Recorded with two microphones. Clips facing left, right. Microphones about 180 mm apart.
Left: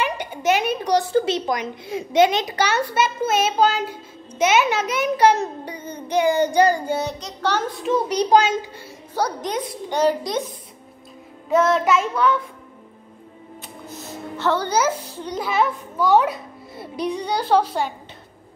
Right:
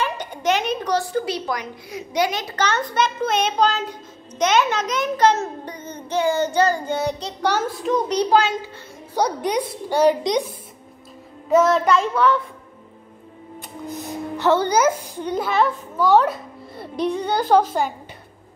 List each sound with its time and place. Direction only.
0.0 s a sound: 10° left (ahead or behind)
1.1 s a woman's voice: 25° left (ahead or behind)
2.5 s a child's voice: 10° left (ahead or behind)
7.4 s a woman's voice: 10° right (ahead or behind)
7.8 s a child's voice: 10° left (ahead or behind)
9.1 s a woman's voice: 15° right (ahead or behind)
11.4 s child singing: centre (ahead or behind)
14.3 s speech: 20° right (ahead or behind)
14.9 s a child's voice: 10° right (ahead or behind)